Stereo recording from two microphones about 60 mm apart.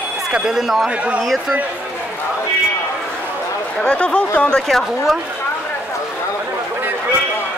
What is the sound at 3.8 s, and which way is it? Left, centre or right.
Speech, centre.